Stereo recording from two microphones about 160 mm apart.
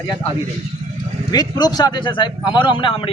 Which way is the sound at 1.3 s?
25° left (ahead or behind).